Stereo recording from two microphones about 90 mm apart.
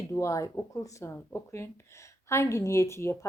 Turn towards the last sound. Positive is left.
turn(degrees=30)  # may be behind; listen again after turning